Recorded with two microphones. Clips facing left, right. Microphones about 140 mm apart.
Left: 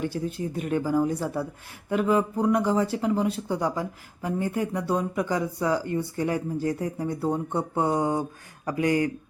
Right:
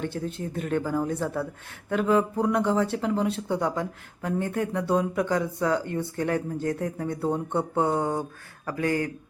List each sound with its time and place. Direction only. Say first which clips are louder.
0.0 s speech: left 2 dB; 5° left (ahead or behind)